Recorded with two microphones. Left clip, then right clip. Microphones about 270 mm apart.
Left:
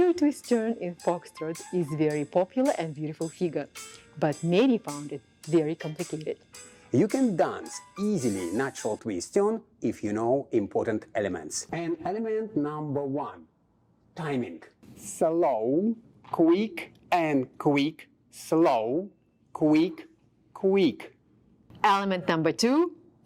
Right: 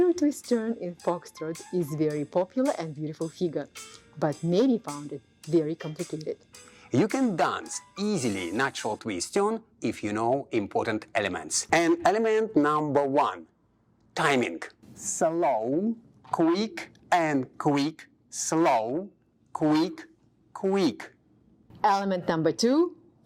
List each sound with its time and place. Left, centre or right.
0.0 s a woman's voice: centre
5.5 s speech: centre
5.7 s speech: centre
6.9 s speech: right
7.6 s speech: centre
8.0 s speech: right
8.5 s speech: right
9.0 s speech: right
11.7 s speech: centre
14.9 s speech: right
18.4 s speech: right
21.8 s speech: centre